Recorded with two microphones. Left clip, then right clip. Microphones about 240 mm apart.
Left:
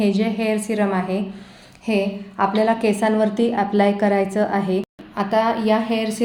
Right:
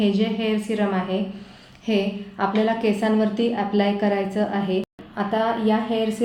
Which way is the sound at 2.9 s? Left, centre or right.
Left.